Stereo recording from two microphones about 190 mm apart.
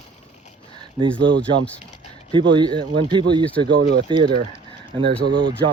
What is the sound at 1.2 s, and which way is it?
Speech, 70° right (ahead or behind).